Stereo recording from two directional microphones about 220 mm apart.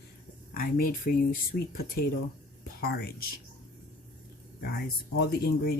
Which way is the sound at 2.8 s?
45° left (ahead or behind).